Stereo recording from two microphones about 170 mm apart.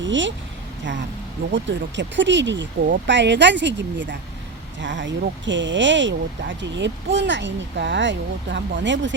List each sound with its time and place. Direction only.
0.0 s speech: 90° right
1.5 s speech: 90° right